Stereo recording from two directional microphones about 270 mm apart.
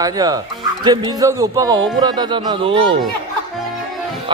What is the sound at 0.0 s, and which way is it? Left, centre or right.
Speech, centre.